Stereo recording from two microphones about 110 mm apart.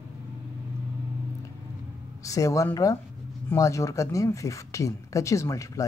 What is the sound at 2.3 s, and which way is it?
Speech, 30° left (ahead or behind).